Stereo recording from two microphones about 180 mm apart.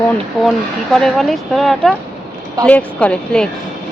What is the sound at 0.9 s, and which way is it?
Speech, centre (ahead or behind).